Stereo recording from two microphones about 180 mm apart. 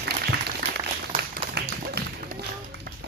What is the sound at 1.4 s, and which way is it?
Tap, 65° right (ahead or behind).